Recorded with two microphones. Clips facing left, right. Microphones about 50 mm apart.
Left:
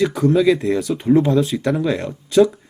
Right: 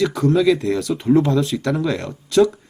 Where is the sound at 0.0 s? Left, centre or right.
Centre.